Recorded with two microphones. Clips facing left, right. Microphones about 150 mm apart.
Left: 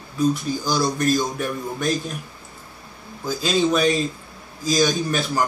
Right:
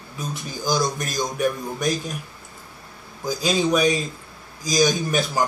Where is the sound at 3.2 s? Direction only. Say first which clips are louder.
Left 1 dB; 15° right (ahead or behind).